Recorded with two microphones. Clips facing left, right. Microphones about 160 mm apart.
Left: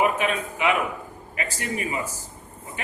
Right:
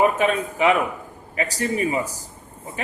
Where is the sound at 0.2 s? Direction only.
35° right (ahead or behind).